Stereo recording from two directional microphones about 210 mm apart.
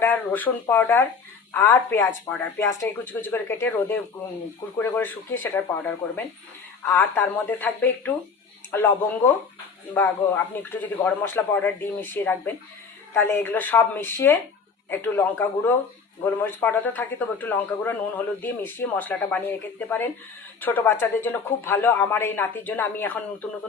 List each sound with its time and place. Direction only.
0.0 s a man's voice: 10° left (ahead or behind)